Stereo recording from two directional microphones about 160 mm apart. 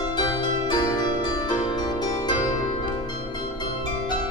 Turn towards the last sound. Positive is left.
turn(degrees=25)  # may be behind; listen again after turning